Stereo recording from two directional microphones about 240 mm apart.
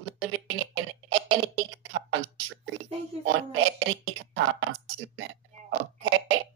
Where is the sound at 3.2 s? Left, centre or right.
Right.